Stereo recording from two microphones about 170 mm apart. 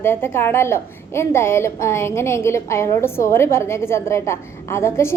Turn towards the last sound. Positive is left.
turn(degrees=15)  # may be behind; listen again after turning